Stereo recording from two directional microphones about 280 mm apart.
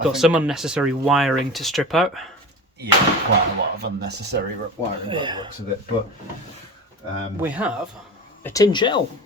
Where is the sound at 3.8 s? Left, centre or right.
Right.